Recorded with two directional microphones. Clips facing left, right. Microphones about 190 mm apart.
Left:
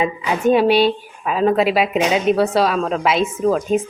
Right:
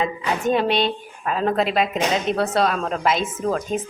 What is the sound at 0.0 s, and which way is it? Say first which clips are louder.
A woman's voice: left 4 dB; 10° left (ahead or behind).